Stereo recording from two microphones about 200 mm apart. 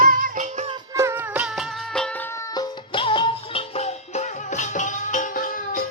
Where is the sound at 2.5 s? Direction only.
20° left (ahead or behind).